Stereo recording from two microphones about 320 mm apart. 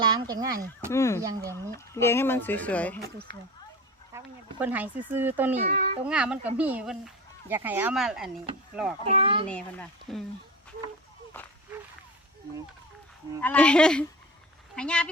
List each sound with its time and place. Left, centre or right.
0.0 s speech: centre
0.9 s speech: centre
4.1 s speech: centre
5.6 s a child's voice: right
6.1 s a child's voice: centre
9.0 s speech: centre
9.5 s speech: centre
11.3 s a sound: centre
13.4 s speech: centre